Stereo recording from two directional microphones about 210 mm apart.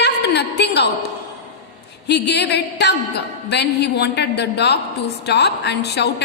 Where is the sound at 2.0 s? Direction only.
55° left (ahead or behind).